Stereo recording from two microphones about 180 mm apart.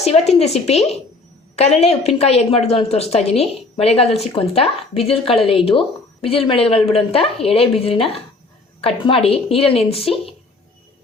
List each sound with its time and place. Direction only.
0.0 s a woman's voice: 35° left (ahead or behind)